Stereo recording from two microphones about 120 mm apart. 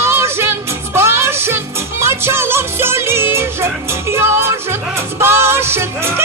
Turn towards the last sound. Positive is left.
turn(degrees=-20)  # may be behind; listen again after turning